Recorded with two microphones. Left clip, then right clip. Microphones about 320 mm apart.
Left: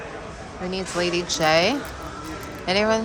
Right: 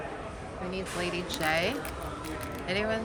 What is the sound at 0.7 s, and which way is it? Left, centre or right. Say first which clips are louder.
A woman's voice: left 9 dB; centre.